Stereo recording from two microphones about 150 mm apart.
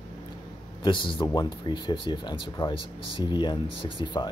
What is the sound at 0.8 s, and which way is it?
Speech, 35° left (ahead or behind).